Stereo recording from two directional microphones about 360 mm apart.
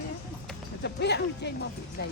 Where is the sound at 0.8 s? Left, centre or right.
Left.